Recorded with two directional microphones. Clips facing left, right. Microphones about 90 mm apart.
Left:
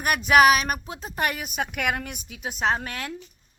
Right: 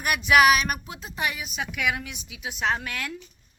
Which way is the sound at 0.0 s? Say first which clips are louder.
Left 2 dB; 40° left (ahead or behind).